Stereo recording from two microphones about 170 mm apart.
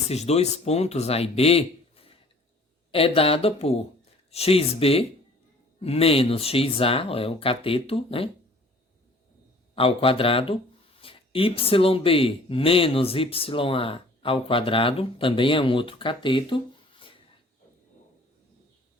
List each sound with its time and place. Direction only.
0.1 s speech: 40° left (ahead or behind)
9.7 s speech: 35° left (ahead or behind)